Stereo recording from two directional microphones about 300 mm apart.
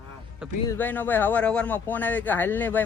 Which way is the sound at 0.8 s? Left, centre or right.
Centre.